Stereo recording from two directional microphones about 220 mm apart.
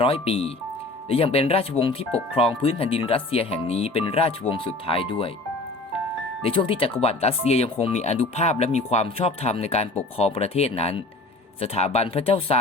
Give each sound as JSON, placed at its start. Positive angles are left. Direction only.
{"t": 0.0, "sound": "speech", "side_deg": 25}
{"t": 6.4, "sound": "speech", "side_deg": 25}